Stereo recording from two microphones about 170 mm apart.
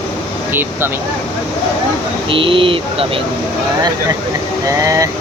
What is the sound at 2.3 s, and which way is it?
Speech, 30° right (ahead or behind).